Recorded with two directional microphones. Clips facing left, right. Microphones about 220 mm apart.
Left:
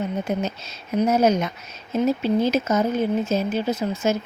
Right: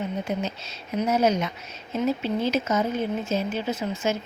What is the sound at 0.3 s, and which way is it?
Speech, 45° left (ahead or behind).